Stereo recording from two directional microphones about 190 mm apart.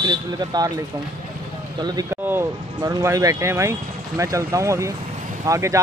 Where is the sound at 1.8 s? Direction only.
20° right (ahead or behind).